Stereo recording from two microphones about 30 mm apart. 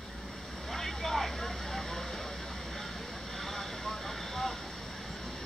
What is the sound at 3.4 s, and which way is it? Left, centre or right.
Vehicle, centre.